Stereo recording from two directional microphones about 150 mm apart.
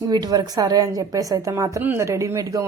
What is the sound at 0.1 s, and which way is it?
Speech, 25° right (ahead or behind).